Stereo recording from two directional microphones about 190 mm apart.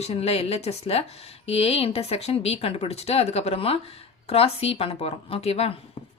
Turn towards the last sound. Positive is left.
turn(degrees=30)  # may be behind; listen again after turning